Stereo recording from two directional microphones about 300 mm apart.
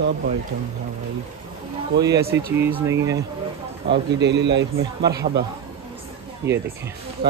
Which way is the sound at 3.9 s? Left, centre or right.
Right.